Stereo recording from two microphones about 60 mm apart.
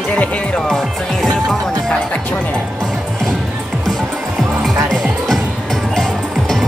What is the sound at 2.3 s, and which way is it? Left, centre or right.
Speech, centre.